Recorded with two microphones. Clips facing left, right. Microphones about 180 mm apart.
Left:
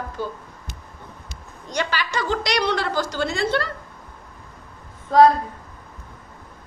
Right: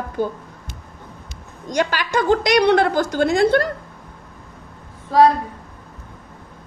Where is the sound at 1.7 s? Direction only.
45° right (ahead or behind).